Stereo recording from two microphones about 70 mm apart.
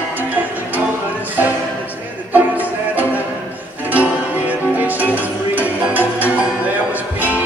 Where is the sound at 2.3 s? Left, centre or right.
Right.